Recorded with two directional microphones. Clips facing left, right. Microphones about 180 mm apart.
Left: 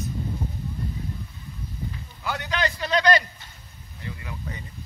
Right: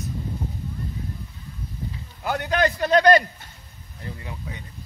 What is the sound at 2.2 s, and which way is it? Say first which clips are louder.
A man's voice: right 5 dB; 50° right (ahead or behind).